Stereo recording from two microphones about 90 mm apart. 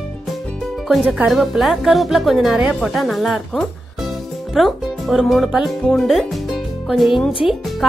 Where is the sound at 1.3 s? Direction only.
Centre (ahead or behind).